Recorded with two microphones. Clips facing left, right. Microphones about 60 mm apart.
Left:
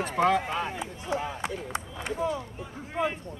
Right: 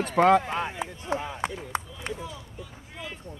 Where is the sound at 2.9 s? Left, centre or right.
Left.